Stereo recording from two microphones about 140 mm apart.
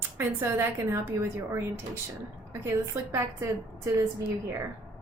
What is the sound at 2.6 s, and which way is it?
Speech, 20° right (ahead or behind).